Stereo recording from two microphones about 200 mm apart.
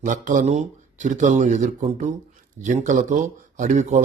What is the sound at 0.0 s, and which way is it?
Speech, 40° right (ahead or behind).